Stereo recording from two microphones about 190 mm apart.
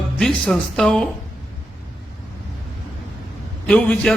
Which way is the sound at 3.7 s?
5° left (ahead or behind).